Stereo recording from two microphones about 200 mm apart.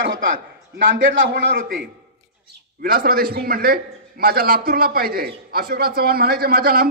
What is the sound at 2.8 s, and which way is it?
A man's voice, 45° right (ahead or behind).